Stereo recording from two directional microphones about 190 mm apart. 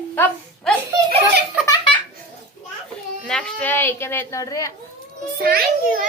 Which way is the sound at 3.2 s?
5° left (ahead or behind).